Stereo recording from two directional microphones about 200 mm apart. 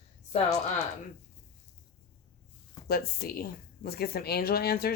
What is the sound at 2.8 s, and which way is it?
Speech, 50° left (ahead or behind).